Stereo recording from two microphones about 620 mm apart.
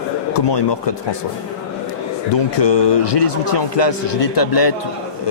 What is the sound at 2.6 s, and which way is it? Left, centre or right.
Speech, left.